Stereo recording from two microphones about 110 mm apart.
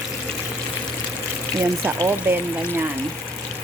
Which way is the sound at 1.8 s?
20° right (ahead or behind).